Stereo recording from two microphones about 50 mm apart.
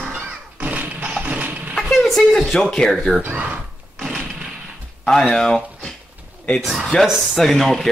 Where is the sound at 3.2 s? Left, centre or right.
Right.